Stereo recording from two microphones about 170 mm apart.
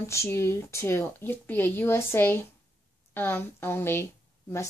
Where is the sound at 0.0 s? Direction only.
15° left (ahead or behind).